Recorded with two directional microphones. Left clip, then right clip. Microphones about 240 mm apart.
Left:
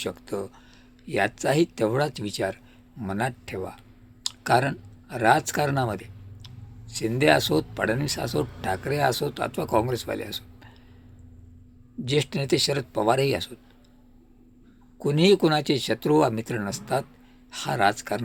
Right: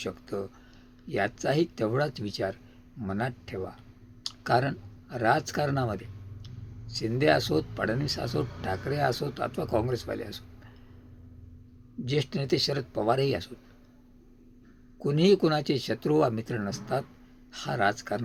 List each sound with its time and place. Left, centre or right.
0.0 s speech: centre
12.0 s speech: centre
14.9 s speech: centre